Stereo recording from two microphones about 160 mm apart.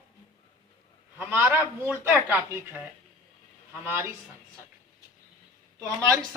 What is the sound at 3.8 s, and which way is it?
Speech, 15° right (ahead or behind).